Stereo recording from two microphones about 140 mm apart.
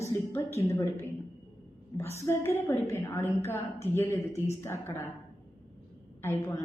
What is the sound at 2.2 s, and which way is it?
A woman's voice, 20° left (ahead or behind).